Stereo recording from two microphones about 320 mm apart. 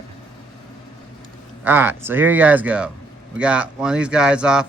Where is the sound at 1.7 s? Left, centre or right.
Centre.